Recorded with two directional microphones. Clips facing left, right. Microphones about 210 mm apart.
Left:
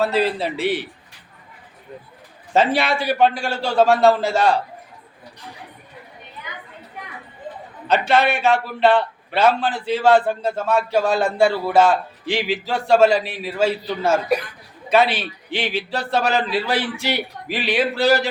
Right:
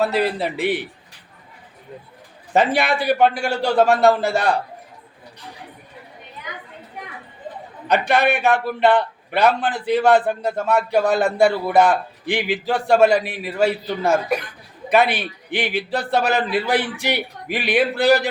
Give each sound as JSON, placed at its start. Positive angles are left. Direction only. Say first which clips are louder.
{"t": 0.0, "sound": "a man's voice", "louder": "even", "side_deg": -15}
{"t": 2.5, "sound": "a man's voice", "louder": "even", "side_deg": -15}
{"t": 7.9, "sound": "a man's voice", "louder": "even", "side_deg": -15}